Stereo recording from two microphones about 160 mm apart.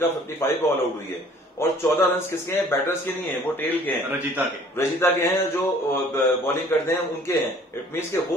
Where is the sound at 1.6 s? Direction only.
15° left (ahead or behind).